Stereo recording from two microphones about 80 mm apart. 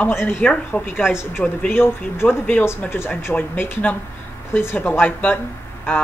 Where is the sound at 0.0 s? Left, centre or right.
Left.